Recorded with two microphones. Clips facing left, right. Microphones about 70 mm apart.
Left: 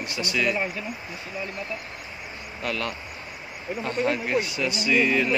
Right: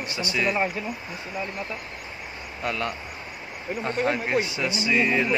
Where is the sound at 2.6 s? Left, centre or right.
Right.